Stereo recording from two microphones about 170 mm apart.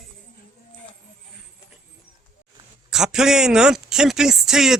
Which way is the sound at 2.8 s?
5° right (ahead or behind).